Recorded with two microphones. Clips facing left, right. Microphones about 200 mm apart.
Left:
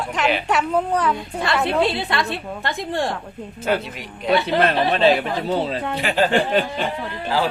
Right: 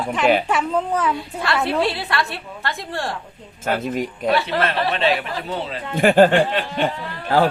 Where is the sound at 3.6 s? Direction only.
45° right (ahead or behind).